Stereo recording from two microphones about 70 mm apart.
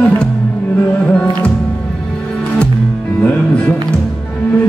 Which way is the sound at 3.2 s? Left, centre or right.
Centre.